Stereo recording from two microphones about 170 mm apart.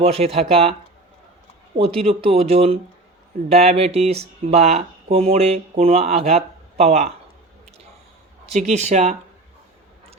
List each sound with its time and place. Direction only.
0.0 s speech: 35° right (ahead or behind)
2.0 s speech: 35° right (ahead or behind)
8.4 s speech: 40° right (ahead or behind)